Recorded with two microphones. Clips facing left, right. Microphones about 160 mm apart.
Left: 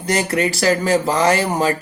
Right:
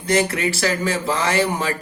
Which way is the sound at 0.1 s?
40° left (ahead or behind).